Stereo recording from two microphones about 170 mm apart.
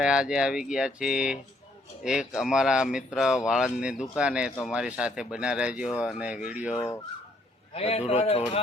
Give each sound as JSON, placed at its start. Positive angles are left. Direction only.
{"t": 0.0, "sound": "speech", "side_deg": -5}
{"t": 7.7, "sound": "a man's voice", "side_deg": 35}